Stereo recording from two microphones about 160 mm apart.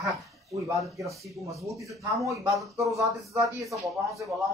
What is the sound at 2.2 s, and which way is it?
Speech, 20° right (ahead or behind).